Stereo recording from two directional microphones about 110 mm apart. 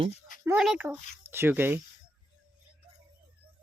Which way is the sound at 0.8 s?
20° right (ahead or behind).